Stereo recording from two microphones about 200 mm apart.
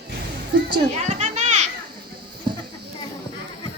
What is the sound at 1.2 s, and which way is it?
Children playing, 35° right (ahead or behind).